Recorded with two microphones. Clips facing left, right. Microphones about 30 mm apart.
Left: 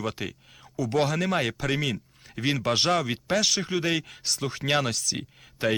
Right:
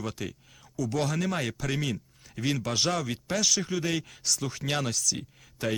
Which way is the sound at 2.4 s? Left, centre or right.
Left.